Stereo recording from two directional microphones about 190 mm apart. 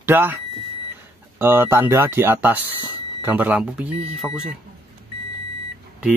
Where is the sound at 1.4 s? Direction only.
10° right (ahead or behind).